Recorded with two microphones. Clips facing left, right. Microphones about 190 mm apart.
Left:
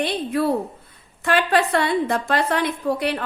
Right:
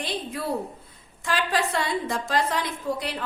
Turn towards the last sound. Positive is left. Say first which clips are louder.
# left 7 dB
turn(degrees=65)  # may be behind; listen again after turning